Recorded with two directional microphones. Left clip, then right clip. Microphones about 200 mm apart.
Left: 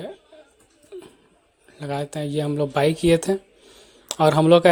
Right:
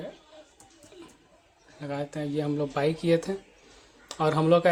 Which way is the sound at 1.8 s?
45° left (ahead or behind).